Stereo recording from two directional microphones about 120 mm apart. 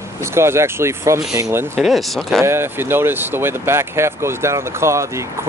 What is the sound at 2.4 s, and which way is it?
Speech, 20° right (ahead or behind).